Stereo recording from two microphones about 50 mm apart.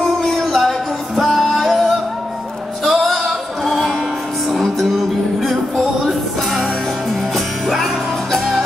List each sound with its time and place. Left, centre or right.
0.0 s music: centre
7.3 s music: centre